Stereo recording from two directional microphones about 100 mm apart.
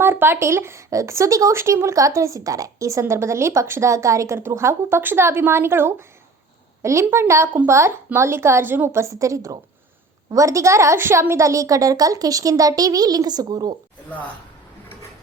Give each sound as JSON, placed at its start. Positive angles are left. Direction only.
{"t": 0.0, "sound": "a woman's voice", "side_deg": -20}